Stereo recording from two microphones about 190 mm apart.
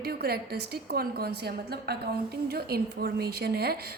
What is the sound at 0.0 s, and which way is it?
A woman's voice, 55° right (ahead or behind).